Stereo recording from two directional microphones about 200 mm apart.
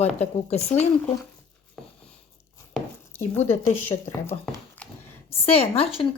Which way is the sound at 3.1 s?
15° left (ahead or behind).